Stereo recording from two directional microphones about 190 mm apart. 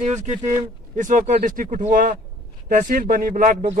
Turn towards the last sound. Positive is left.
turn(degrees=-45)  # may be behind; listen again after turning